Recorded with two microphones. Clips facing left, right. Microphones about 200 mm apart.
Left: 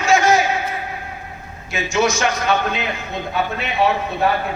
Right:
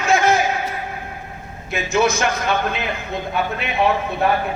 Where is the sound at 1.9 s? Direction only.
55° right (ahead or behind).